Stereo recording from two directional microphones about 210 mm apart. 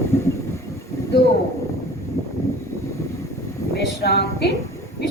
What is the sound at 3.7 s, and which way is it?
Speech, 50° left (ahead or behind).